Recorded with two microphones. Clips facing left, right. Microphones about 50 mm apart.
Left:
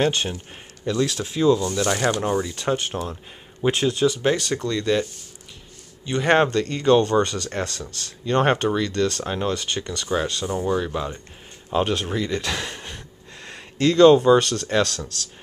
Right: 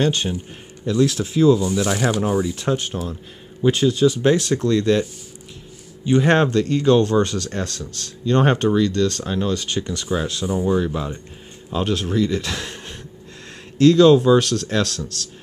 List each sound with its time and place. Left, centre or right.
0.0 s speech: centre
3.6 s speech: centre
6.2 s speech: centre
7.4 s speech: left
8.3 s speech: centre
9.0 s speech: centre
9.9 s speech: centre
11.7 s speech: centre